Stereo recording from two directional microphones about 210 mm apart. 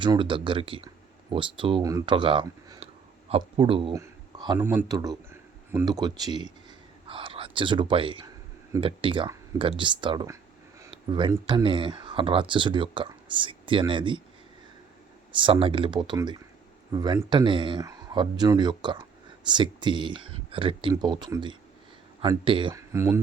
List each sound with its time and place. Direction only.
0.0 s a man's voice: 20° right (ahead or behind)
15.4 s speech: 25° right (ahead or behind)